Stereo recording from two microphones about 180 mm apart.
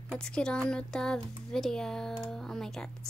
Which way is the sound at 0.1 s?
5° left (ahead or behind).